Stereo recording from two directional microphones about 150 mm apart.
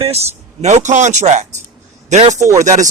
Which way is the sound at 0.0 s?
45° right (ahead or behind).